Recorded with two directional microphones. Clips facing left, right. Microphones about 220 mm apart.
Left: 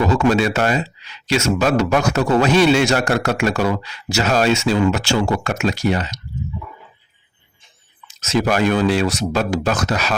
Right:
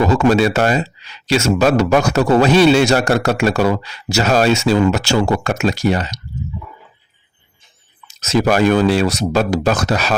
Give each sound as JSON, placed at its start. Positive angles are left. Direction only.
{"t": 0.0, "sound": "speech", "side_deg": -40}
{"t": 8.0, "sound": "speech", "side_deg": -40}